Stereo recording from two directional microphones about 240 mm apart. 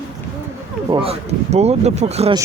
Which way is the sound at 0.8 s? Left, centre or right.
Right.